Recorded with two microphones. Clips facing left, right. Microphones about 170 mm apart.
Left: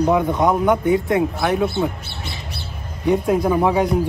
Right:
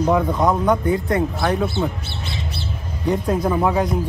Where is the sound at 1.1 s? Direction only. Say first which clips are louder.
Left 1 dB; 5° left (ahead or behind).